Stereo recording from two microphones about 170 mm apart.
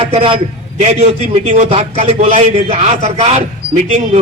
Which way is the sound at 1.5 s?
35° right (ahead or behind).